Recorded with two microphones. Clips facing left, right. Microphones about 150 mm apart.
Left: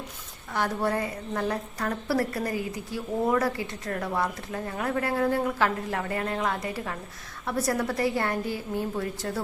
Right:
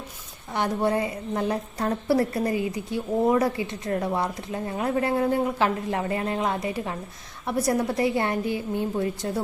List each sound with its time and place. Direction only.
0.5 s a woman's voice: 20° right (ahead or behind)